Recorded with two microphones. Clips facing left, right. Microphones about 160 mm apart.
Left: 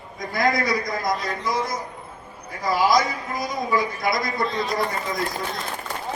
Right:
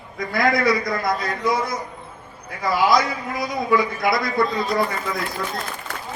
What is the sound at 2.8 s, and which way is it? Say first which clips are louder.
A man's voice: right 1 dB; 60° right (ahead or behind).